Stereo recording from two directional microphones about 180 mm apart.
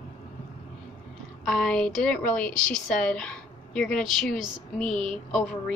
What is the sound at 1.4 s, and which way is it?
A woman's voice, centre (ahead or behind).